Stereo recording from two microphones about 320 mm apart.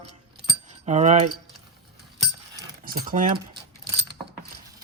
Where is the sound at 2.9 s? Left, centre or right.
Right.